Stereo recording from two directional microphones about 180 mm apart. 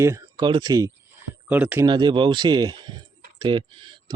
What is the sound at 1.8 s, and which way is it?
Speech, 25° right (ahead or behind).